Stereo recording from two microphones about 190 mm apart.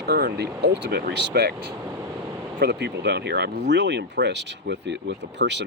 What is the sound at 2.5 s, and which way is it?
Speech, 60° right (ahead or behind).